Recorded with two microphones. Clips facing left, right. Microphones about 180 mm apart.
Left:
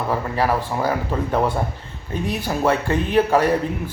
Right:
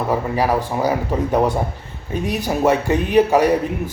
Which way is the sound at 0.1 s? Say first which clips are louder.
Right 2 dB; 15° right (ahead or behind).